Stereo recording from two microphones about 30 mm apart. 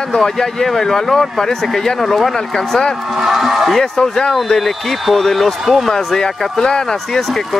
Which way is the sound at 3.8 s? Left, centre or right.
Centre.